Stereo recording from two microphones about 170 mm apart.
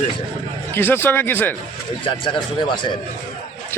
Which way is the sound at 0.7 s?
15° left (ahead or behind).